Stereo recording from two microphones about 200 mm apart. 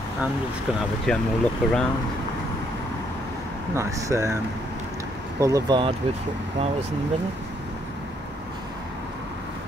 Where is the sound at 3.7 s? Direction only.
15° right (ahead or behind).